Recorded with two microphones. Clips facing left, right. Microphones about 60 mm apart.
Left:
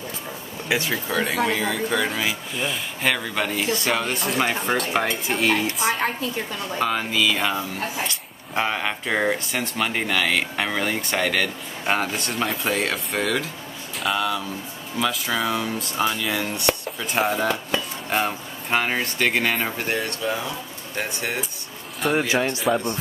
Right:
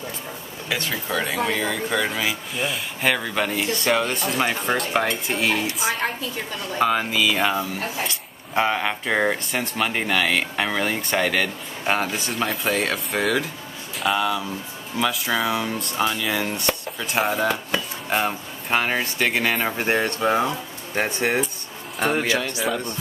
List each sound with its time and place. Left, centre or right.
0.7 s speech: centre
19.8 s speech: right
20.2 s speech: right
22.3 s speech: left